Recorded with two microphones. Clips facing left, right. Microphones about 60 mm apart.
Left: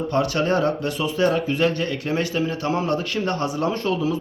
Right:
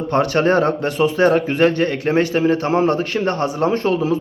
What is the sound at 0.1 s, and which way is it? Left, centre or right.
Speech, right.